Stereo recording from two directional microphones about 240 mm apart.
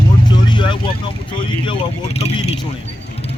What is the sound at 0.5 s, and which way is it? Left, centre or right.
Vehicle, centre.